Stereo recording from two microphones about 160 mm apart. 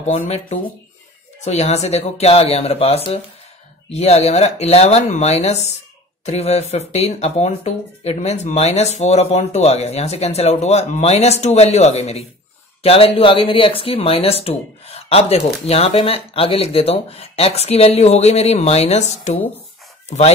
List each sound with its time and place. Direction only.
0.0 s speech: 45° left (ahead or behind)